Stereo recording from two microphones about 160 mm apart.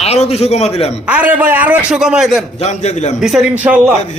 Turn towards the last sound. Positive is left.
turn(degrees=-5)  # may be behind; listen again after turning